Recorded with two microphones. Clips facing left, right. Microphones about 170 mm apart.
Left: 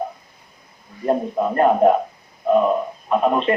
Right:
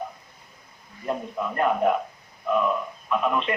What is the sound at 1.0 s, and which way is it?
Speech, 40° left (ahead or behind).